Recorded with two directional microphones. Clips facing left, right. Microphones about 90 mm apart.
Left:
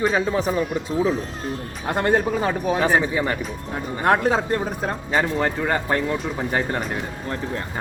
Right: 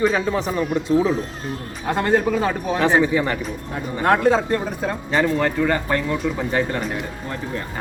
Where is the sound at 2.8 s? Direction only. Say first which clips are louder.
Right 5 dB; 15° left (ahead or behind).